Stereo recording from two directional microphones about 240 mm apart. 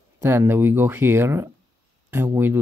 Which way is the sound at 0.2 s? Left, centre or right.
Centre.